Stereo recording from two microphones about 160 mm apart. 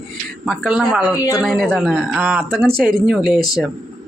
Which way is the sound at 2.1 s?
10° right (ahead or behind).